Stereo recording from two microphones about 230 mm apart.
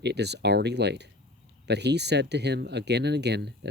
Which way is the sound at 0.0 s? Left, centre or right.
Right.